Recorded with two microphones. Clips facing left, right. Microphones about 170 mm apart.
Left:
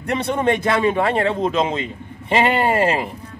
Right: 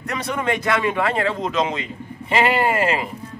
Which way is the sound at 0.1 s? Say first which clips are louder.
Left 5 dB; 30° left (ahead or behind).